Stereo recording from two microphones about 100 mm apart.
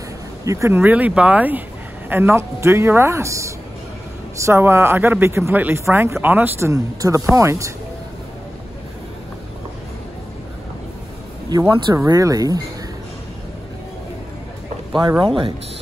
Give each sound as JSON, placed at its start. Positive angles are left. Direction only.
{"t": 0.5, "sound": "speech", "side_deg": -25}
{"t": 6.7, "sound": "speech", "side_deg": -35}
{"t": 11.4, "sound": "speech", "side_deg": -35}
{"t": 15.0, "sound": "speech", "side_deg": -45}